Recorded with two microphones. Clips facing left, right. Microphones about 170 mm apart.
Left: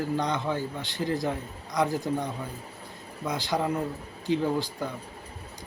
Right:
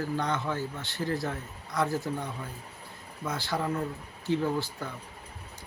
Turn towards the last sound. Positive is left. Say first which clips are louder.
# left 2 dB
turn(degrees=15)  # may be behind; listen again after turning